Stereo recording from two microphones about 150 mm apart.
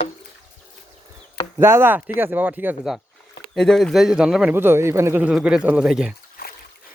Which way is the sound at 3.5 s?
5° left (ahead or behind).